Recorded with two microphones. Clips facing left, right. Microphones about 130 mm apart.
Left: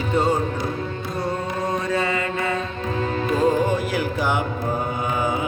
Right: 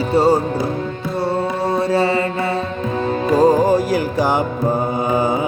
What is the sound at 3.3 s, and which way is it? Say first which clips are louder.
Music: right 7 dB; 35° right (ahead or behind).